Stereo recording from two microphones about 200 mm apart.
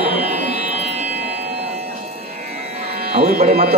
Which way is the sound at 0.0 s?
10° right (ahead or behind).